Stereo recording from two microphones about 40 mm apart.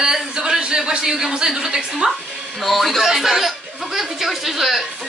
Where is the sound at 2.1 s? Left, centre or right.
Centre.